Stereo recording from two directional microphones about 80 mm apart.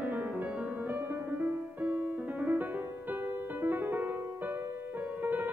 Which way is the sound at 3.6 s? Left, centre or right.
Right.